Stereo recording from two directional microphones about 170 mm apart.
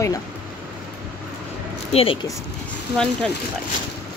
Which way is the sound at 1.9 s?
35° left (ahead or behind).